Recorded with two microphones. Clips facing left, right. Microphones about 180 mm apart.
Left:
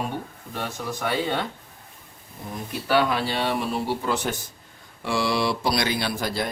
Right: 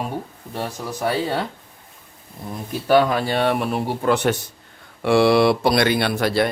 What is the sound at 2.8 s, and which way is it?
Speech, 45° right (ahead or behind).